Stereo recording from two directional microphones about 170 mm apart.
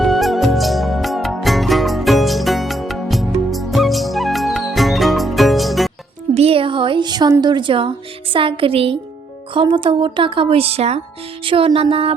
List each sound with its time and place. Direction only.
0.0 s music: centre (ahead or behind)
6.3 s a woman's voice: 35° right (ahead or behind)